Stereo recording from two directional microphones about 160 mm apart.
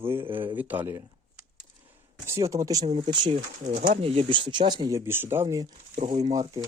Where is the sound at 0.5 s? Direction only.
10° right (ahead or behind).